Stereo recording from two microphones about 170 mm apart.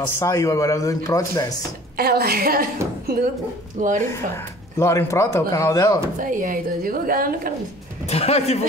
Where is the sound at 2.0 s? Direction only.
65° right (ahead or behind).